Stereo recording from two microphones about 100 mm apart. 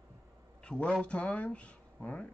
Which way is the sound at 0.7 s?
10° left (ahead or behind).